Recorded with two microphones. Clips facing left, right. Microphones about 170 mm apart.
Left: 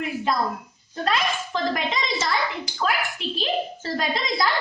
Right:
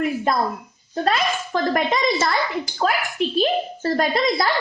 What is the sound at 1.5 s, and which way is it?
A woman's voice, 55° right (ahead or behind).